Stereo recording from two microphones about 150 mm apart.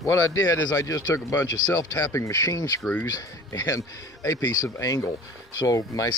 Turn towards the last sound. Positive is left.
turn(degrees=20)  # may be behind; listen again after turning